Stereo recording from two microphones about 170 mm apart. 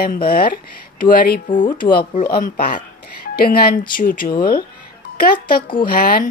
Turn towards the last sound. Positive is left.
turn(degrees=60)  # may be behind; listen again after turning